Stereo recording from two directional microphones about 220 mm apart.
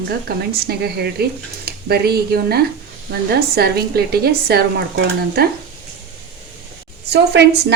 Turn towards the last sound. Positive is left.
turn(degrees=-50)  # may be behind; listen again after turning